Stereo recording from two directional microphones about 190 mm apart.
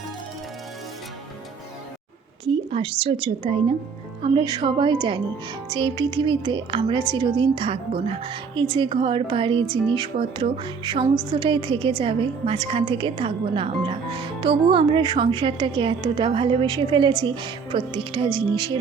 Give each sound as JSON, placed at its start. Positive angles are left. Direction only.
{"t": 2.4, "sound": "a woman's voice", "side_deg": -30}